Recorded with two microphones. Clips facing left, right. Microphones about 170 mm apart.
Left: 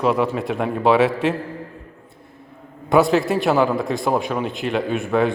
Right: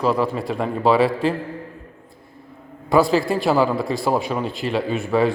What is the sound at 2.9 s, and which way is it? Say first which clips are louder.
A man's voice: left 1 dB; centre (ahead or behind).